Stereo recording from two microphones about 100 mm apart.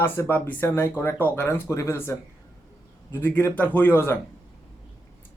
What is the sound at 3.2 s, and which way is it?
Speech, 15° left (ahead or behind).